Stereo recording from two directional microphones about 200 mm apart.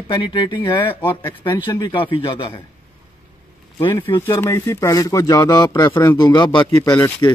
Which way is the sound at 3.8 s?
25° left (ahead or behind).